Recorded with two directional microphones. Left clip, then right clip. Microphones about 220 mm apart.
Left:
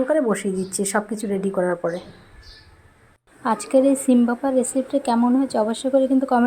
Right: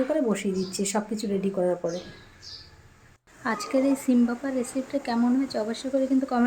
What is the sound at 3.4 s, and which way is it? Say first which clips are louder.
Speech: left 7 dB; 20° left (ahead or behind).